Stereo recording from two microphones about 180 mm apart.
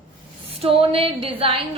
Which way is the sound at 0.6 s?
30° right (ahead or behind).